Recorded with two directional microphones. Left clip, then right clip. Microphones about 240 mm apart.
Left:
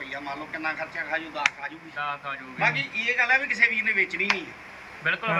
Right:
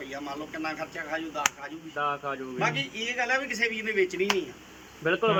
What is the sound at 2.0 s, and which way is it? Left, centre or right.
Speech, right.